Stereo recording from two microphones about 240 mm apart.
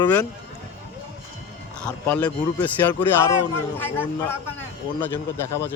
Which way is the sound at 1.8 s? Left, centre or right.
Centre.